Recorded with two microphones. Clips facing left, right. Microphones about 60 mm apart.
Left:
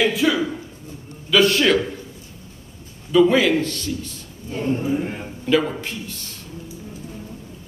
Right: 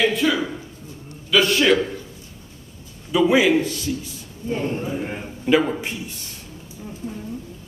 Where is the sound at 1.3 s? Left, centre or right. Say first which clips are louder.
Left 1 dB; centre.